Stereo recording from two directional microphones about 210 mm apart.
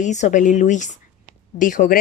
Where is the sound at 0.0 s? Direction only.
35° left (ahead or behind).